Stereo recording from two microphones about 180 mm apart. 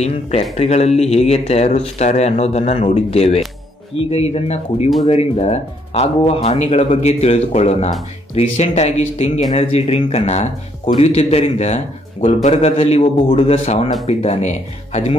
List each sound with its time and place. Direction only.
0.0 s speech: 35° left (ahead or behind)